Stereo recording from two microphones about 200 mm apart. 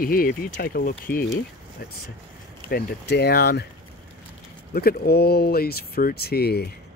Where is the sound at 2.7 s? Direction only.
50° left (ahead or behind).